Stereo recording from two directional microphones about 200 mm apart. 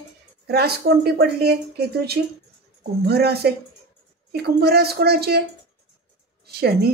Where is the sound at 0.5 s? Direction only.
50° right (ahead or behind).